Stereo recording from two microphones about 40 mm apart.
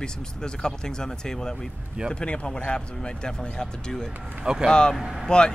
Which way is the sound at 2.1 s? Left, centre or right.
Left.